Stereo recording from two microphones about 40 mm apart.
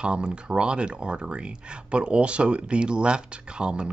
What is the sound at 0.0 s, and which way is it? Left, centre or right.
Speech, right.